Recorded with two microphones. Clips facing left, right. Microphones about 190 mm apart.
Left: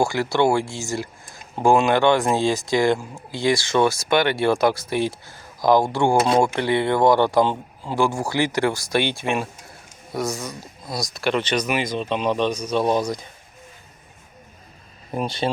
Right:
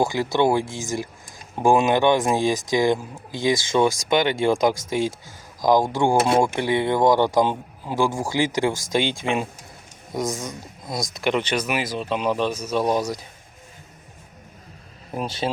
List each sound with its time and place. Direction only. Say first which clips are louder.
0.0 s speech: left 1 dB; 20° right (ahead or behind)
15.1 s speech: left 2 dB; 5° right (ahead or behind)